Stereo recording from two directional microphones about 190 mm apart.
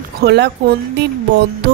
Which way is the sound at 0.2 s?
60° right (ahead or behind).